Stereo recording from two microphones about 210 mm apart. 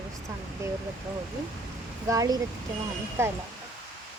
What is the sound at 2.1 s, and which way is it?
A woman's voice, 15° right (ahead or behind).